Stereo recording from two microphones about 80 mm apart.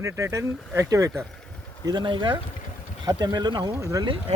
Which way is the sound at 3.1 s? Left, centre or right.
Right.